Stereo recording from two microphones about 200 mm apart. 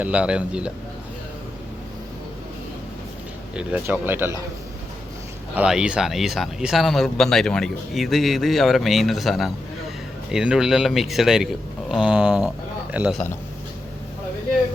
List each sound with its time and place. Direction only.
0.0 s speech: 5° right (ahead or behind)
3.5 s speech: 5° right (ahead or behind)
5.5 s a man's voice: 5° right (ahead or behind)